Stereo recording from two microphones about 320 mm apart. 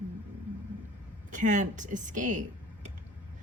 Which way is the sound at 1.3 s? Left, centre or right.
Right.